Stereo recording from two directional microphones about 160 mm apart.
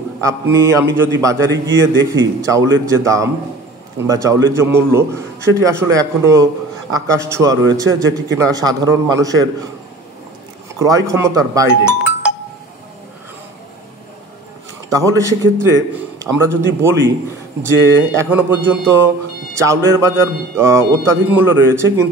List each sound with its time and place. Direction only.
0.2 s a man's voice: 20° right (ahead or behind)
10.8 s a man's voice: 20° right (ahead or behind)
14.9 s a man's voice: 20° right (ahead or behind)